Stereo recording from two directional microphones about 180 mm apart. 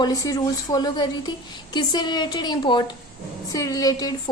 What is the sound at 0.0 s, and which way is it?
A woman's voice, 20° left (ahead or behind).